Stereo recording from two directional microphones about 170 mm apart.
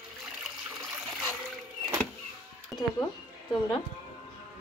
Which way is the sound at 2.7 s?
15° left (ahead or behind).